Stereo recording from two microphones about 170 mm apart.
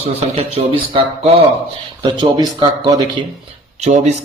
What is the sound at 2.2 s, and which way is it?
Speech, 25° right (ahead or behind).